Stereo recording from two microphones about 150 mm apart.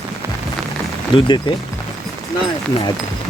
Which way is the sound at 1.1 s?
35° left (ahead or behind).